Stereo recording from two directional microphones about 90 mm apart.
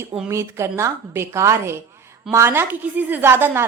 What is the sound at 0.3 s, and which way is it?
A woman's voice, 30° right (ahead or behind).